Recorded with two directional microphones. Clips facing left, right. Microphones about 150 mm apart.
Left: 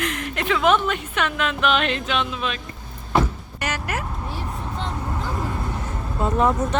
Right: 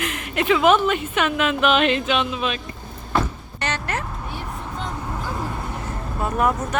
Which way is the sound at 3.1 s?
10° left (ahead or behind).